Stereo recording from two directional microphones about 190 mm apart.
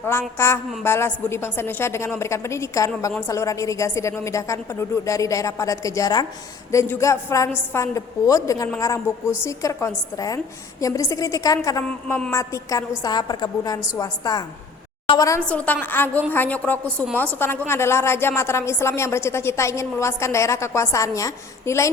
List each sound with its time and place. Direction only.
0.0 s a woman's voice: 10° left (ahead or behind)